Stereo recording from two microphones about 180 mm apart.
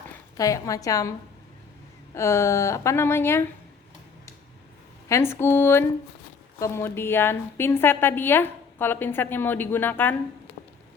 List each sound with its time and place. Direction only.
0.3 s a woman's voice: 20° left (ahead or behind)
2.1 s a woman's voice: 15° left (ahead or behind)
5.0 s a woman's voice: 15° left (ahead or behind)